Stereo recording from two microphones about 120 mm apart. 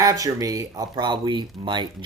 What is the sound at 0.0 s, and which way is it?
Speech, 30° right (ahead or behind).